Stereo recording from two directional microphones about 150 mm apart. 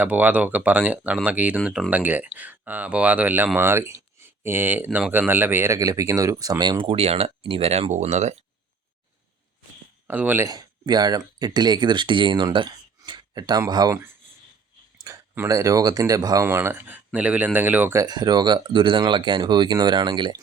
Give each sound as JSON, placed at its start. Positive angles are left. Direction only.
{"t": 0.0, "sound": "speech", "side_deg": -10}
{"t": 10.1, "sound": "speech", "side_deg": -10}
{"t": 10.5, "sound": "speech", "side_deg": -25}
{"t": 15.0, "sound": "speech", "side_deg": -20}
{"t": 18.0, "sound": "speech", "side_deg": -30}